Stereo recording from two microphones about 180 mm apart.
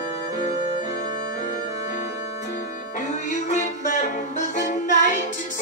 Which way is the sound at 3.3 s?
40° left (ahead or behind).